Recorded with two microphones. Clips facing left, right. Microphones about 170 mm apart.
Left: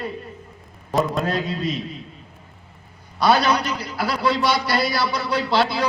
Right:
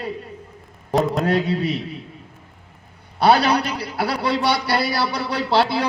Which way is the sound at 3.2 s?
60° right (ahead or behind).